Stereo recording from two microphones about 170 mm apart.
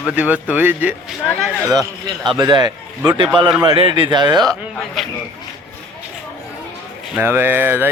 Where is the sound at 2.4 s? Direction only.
25° right (ahead or behind).